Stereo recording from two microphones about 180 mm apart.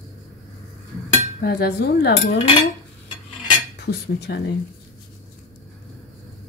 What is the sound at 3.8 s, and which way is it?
Cutlery, 65° left (ahead or behind).